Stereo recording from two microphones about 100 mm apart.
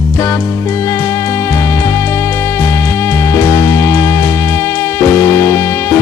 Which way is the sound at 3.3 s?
30° left (ahead or behind).